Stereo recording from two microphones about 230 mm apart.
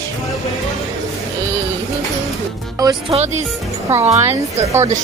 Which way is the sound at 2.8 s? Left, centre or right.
Centre.